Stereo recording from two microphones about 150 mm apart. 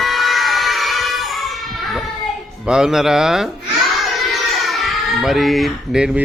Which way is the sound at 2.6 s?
5° right (ahead or behind).